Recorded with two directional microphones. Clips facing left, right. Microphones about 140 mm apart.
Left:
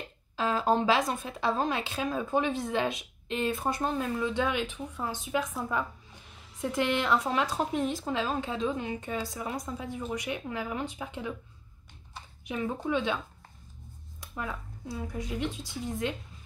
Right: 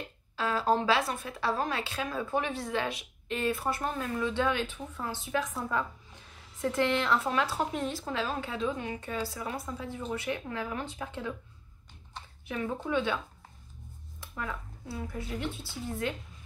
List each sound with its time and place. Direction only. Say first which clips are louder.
0.4 s speech: left 1 dB; 20° left (ahead or behind)
12.4 s speech: left 2 dB; 20° left (ahead or behind)
14.3 s speech: left 1 dB; 20° left (ahead or behind)